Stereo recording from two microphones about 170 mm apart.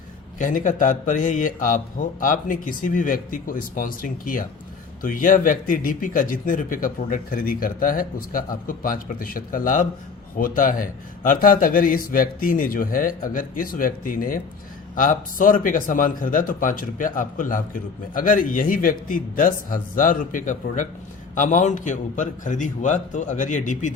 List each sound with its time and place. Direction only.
0.3 s a man's voice: 50° left (ahead or behind)